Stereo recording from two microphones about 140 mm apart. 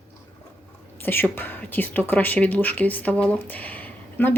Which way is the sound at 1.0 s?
15° left (ahead or behind).